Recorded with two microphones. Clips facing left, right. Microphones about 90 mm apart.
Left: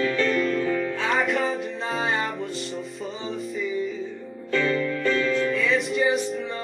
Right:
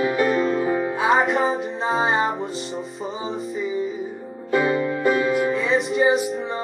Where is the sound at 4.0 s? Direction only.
15° right (ahead or behind).